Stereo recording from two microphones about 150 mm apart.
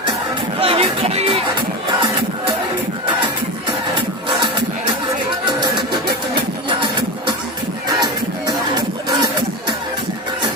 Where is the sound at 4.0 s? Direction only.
30° right (ahead or behind).